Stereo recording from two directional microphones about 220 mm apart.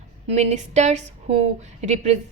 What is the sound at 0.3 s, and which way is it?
A woman's voice, 30° right (ahead or behind).